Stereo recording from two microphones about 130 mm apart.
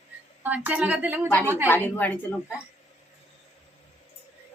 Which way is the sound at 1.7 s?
15° left (ahead or behind).